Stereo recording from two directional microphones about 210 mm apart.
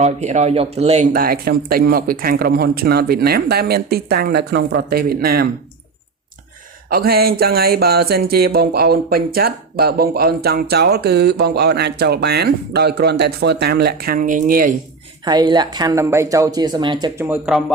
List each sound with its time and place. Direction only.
0.0 s speech: 30° right (ahead or behind)
1.1 s speech: 45° right (ahead or behind)
6.9 s speech: 45° right (ahead or behind)
15.2 s speech: 20° right (ahead or behind)
17.2 s speech: 10° right (ahead or behind)